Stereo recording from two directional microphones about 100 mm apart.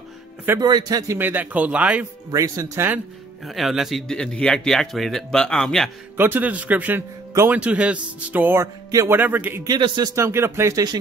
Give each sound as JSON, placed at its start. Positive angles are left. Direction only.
{"t": 0.6, "sound": "a man's voice", "side_deg": -45}
{"t": 1.1, "sound": "speech", "side_deg": -20}
{"t": 2.3, "sound": "speech", "side_deg": -35}
{"t": 3.4, "sound": "speech", "side_deg": 0}
{"t": 6.1, "sound": "speech", "side_deg": -20}
{"t": 9.2, "sound": "speech", "side_deg": -20}
{"t": 9.7, "sound": "a man's voice", "side_deg": -45}
{"t": 10.1, "sound": "speech", "side_deg": -25}